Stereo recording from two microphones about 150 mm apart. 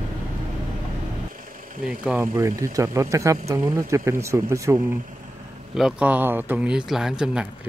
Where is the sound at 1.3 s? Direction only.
65° right (ahead or behind).